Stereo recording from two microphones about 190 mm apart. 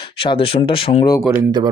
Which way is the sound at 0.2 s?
30° left (ahead or behind).